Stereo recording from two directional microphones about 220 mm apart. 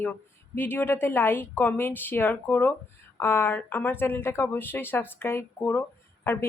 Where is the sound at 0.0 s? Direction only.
10° left (ahead or behind).